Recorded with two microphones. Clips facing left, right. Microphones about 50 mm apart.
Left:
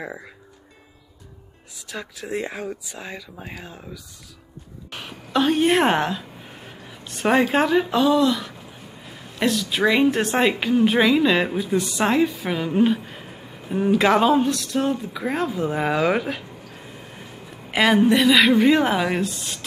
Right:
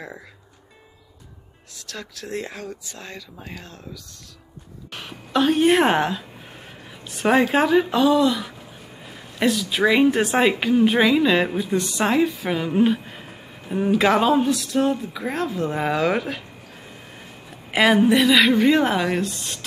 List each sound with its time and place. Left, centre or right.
1.8 s speech: centre
4.9 s a woman's voice: centre